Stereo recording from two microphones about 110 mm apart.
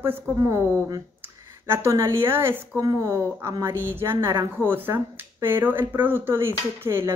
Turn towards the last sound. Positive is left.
turn(degrees=-20)  # may be behind; listen again after turning